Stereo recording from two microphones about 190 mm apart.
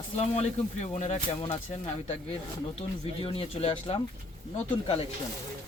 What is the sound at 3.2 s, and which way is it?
Speech, 30° left (ahead or behind).